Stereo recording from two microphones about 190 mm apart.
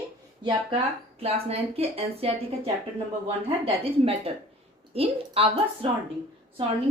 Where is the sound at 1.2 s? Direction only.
30° right (ahead or behind).